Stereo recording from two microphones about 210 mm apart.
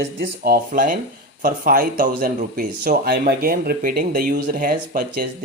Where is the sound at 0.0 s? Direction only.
50° right (ahead or behind).